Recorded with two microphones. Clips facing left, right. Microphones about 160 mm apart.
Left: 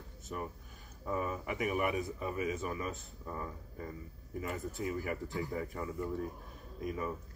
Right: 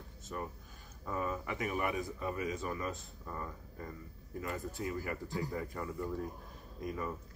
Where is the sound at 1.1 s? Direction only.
10° left (ahead or behind).